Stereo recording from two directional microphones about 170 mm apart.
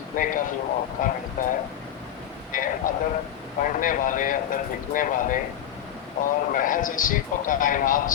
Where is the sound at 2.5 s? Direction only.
50° left (ahead or behind).